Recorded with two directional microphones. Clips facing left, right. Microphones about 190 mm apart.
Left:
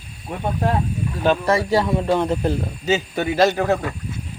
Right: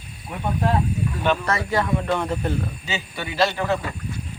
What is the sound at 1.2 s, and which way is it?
A man's voice, 35° left (ahead or behind).